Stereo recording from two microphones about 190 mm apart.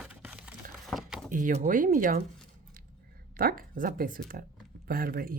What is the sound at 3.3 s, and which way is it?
Speech, 50° right (ahead or behind).